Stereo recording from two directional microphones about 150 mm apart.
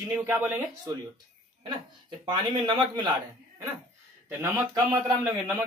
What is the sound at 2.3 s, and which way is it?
Speech, 30° right (ahead or behind).